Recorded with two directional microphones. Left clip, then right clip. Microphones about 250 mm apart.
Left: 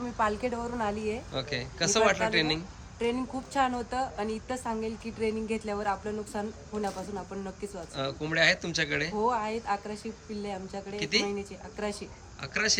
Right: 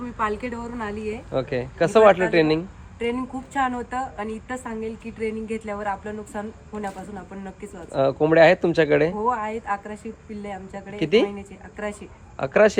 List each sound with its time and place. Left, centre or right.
0.2 s a woman's voice: centre
1.3 s speech: centre
3.0 s a woman's voice: centre
7.9 s speech: centre
9.1 s a woman's voice: centre
10.9 s speech: centre
11.3 s a woman's voice: centre
12.4 s speech: centre